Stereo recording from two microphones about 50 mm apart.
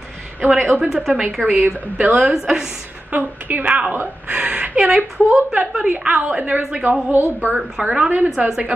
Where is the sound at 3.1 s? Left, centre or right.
Right.